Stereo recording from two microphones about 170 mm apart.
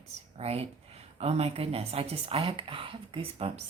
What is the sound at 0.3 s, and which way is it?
A woman's voice, 35° right (ahead or behind).